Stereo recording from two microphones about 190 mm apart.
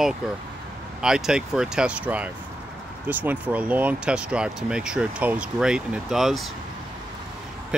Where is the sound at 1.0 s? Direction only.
5° right (ahead or behind).